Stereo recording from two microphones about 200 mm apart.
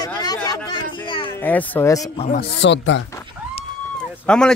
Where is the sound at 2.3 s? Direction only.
60° left (ahead or behind).